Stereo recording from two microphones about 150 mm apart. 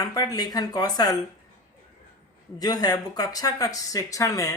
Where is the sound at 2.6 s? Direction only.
25° left (ahead or behind).